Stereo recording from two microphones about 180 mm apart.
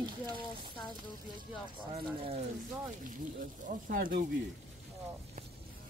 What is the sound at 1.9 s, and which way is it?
Speech, 35° right (ahead or behind).